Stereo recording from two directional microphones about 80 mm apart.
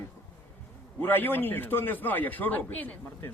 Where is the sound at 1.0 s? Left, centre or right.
Left.